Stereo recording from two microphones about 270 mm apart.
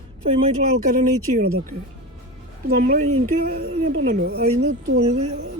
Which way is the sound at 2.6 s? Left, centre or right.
Right.